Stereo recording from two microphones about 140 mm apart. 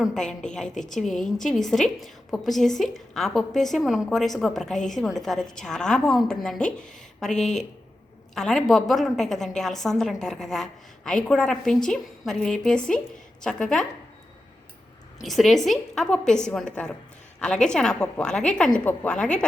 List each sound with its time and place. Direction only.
0.0 s a woman's voice: 5° left (ahead or behind)
15.2 s a woman's voice: centre (ahead or behind)